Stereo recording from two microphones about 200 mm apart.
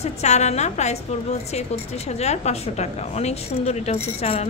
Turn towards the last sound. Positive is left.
turn(degrees=35)  # may be behind; listen again after turning